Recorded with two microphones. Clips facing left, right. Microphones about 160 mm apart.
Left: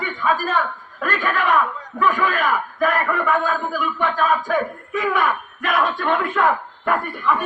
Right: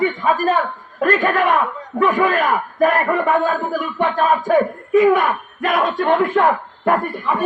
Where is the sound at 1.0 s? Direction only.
45° right (ahead or behind).